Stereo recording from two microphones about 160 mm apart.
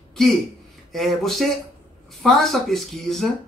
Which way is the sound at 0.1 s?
Centre (ahead or behind).